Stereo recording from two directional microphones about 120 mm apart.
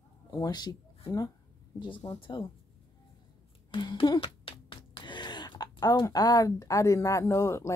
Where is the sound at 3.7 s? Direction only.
40° left (ahead or behind).